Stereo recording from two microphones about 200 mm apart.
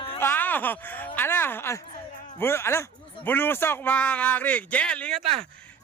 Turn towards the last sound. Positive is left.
turn(degrees=5)  # may be behind; listen again after turning